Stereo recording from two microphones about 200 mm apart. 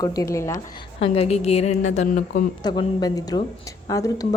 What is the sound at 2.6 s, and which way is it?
Speech, 20° left (ahead or behind).